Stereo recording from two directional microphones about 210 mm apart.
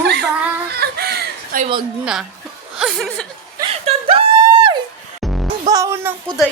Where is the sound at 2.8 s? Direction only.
Centre (ahead or behind).